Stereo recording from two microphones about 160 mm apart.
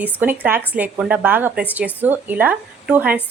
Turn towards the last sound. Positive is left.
turn(degrees=-10)  # may be behind; listen again after turning